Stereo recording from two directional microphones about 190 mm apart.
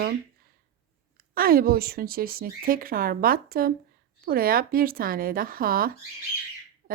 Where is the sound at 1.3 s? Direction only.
50° right (ahead or behind).